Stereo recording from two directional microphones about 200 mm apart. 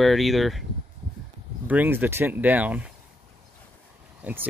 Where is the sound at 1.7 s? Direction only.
10° right (ahead or behind).